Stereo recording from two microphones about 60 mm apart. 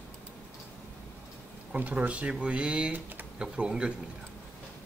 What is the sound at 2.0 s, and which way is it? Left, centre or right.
Speech, centre.